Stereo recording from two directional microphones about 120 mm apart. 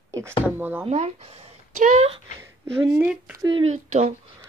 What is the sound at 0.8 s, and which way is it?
Speech, 60° right (ahead or behind).